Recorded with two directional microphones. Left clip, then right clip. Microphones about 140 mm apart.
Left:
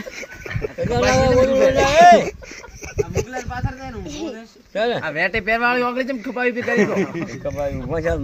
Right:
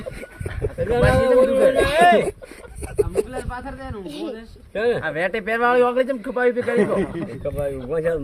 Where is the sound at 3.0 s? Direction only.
40° right (ahead or behind).